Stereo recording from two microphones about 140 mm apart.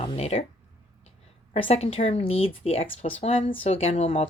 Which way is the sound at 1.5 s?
45° left (ahead or behind).